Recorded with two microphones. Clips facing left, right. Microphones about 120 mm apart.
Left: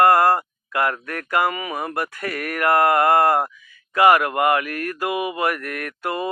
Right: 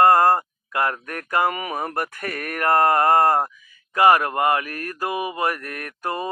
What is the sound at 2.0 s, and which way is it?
Mantra, 40° right (ahead or behind).